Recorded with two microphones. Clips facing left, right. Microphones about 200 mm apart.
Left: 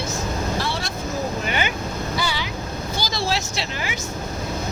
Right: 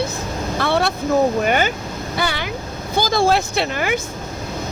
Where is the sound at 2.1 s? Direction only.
55° right (ahead or behind).